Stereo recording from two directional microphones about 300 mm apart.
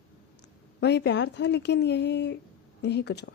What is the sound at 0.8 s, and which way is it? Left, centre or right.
A woman's voice, left.